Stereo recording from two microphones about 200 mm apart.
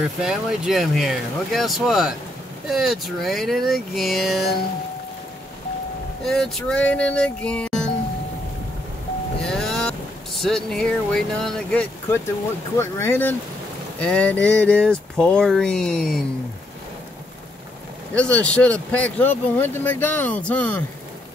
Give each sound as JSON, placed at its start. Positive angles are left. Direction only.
{"t": 0.2, "sound": "speech", "side_deg": 0}
{"t": 6.2, "sound": "speech", "side_deg": 0}
{"t": 9.4, "sound": "speech", "side_deg": 0}
{"t": 18.1, "sound": "speech", "side_deg": 5}